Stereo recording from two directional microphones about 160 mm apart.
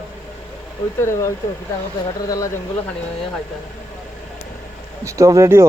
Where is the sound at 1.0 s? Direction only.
15° left (ahead or behind).